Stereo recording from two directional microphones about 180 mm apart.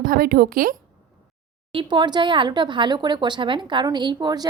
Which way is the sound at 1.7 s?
25° right (ahead or behind).